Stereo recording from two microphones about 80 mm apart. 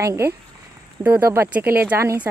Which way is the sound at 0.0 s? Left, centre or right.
Right.